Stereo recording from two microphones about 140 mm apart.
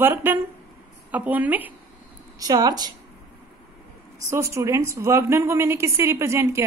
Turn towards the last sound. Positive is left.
turn(degrees=-20)  # may be behind; listen again after turning